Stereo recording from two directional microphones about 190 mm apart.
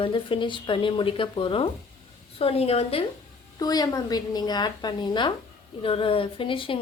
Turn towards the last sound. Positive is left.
turn(degrees=25)  # may be behind; listen again after turning